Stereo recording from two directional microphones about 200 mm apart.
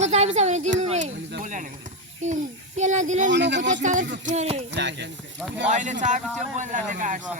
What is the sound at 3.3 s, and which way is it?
Speech, 60° right (ahead or behind).